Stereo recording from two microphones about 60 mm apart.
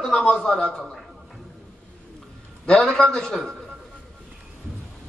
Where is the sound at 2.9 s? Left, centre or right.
Centre.